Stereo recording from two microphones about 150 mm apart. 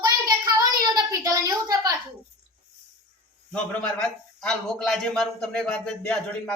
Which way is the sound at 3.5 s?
10° left (ahead or behind).